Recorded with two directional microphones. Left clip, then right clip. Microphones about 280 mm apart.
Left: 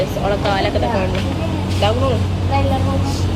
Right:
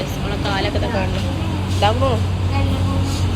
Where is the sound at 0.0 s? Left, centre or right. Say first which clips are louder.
Left 6 dB; centre.